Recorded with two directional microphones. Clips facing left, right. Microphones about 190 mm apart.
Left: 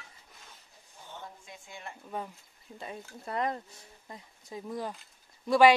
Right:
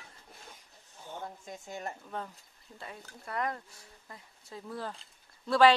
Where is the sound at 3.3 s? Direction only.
20° left (ahead or behind).